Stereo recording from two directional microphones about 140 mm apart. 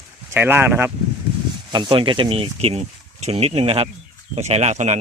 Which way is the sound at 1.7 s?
35° right (ahead or behind).